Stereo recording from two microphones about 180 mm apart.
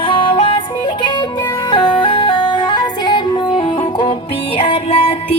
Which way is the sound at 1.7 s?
25° left (ahead or behind).